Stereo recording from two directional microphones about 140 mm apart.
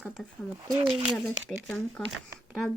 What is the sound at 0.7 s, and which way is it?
Speech, 35° right (ahead or behind).